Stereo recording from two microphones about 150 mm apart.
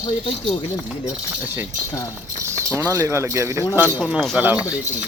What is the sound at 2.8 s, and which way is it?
Speech, 20° right (ahead or behind).